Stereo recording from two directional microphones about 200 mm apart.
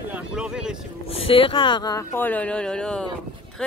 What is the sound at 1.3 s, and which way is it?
Speech, 25° left (ahead or behind).